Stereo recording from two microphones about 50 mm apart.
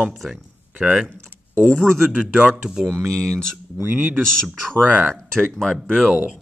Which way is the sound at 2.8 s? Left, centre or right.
Right.